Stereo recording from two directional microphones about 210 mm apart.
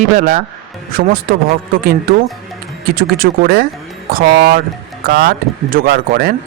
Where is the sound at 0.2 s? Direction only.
40° right (ahead or behind).